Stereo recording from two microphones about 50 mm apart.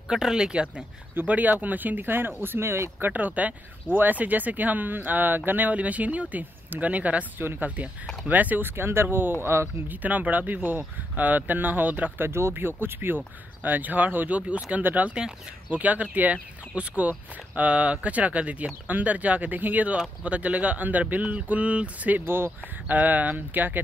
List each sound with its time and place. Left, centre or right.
0.1 s speech: centre
1.2 s speech: right
3.1 s speech: right
9.8 s speech: right
12.3 s speech: right
14.8 s speech: right
15.0 s speech: centre
15.7 s speech: right
22.2 s speech: right
22.8 s speech: right